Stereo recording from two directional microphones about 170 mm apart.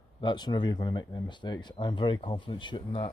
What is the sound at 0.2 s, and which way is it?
Speech, 25° left (ahead or behind).